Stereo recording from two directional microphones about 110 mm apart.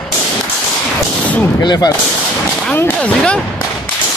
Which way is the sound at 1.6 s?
40° left (ahead or behind).